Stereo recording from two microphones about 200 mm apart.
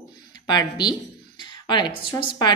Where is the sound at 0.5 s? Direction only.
20° left (ahead or behind).